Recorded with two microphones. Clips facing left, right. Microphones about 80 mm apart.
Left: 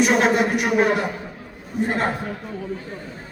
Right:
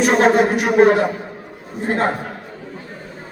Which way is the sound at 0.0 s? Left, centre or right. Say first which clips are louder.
Right 4 dB; right.